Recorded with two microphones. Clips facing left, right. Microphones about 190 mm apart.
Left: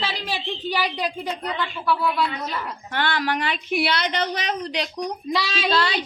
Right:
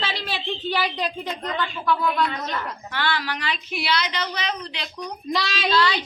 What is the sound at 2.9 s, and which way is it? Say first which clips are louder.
Speech: left 4 dB; 50° left (ahead or behind).